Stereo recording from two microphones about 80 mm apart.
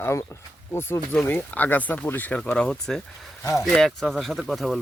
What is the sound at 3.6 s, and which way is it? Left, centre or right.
Speech, centre.